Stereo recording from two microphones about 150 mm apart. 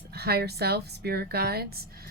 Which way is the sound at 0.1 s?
90° right.